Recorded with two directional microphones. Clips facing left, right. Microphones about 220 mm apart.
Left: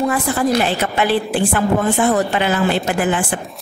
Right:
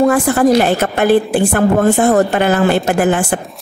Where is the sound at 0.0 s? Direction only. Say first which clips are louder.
Right 7 dB; 50° right (ahead or behind).